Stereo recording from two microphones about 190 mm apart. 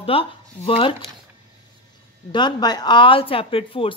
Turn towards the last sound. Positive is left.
turn(degrees=30)  # may be behind; listen again after turning